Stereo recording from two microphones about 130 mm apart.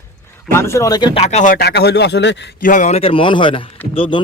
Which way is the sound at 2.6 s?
75° left (ahead or behind).